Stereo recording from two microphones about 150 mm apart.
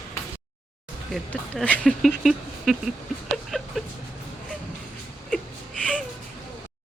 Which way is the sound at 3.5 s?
5° left (ahead or behind).